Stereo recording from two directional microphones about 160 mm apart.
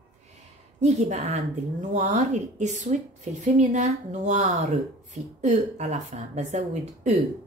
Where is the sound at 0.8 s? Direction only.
45° right (ahead or behind).